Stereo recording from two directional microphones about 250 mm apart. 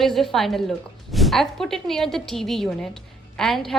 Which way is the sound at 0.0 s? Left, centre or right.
Centre.